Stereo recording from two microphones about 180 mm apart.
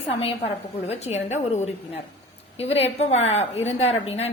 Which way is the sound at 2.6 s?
35° left (ahead or behind).